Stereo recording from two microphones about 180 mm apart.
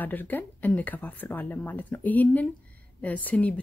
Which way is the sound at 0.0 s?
10° left (ahead or behind).